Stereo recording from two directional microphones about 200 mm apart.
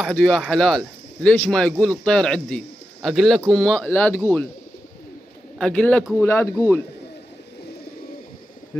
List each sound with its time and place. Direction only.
0.0 s speech: 5° left (ahead or behind)
5.6 s a man's voice: 5° left (ahead or behind)